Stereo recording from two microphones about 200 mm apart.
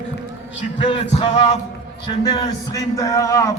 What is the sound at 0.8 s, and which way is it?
Music, 25° left (ahead or behind).